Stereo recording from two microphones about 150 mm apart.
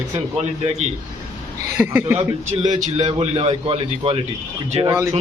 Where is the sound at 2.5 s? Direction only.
30° right (ahead or behind).